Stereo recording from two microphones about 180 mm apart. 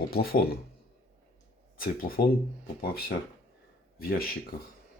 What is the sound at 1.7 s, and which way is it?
Speech, 50° left (ahead or behind).